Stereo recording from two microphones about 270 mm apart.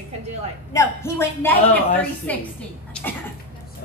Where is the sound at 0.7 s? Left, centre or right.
Centre.